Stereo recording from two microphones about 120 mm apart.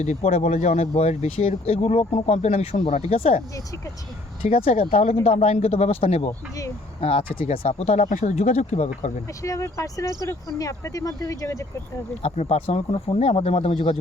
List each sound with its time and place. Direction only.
0.0 s speech: 70° left (ahead or behind)
4.4 s speech: 60° left (ahead or behind)
7.0 s speech: 50° left (ahead or behind); by 8.9 s 75° left (ahead or behind)
9.4 s speech: 25° left (ahead or behind)
12.2 s speech: 60° left (ahead or behind)